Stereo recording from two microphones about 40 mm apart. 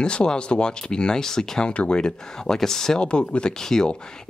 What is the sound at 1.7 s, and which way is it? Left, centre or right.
Speech, left.